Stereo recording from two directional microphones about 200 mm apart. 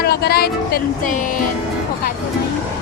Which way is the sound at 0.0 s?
50° left (ahead or behind).